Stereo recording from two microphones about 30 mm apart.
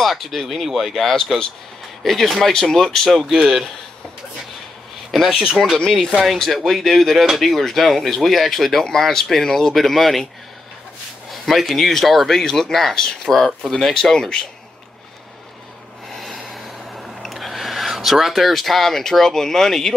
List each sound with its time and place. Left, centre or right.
0.0 s speech: centre
3.2 s speech: centre
5.1 s speech: centre
5.8 s speech: left
6.3 s speech: centre
11.4 s speech: centre
12.3 s speech: centre
14.1 s speech: left
16.4 s vehicle: centre
17.3 s a sound: centre
18.6 s speech: centre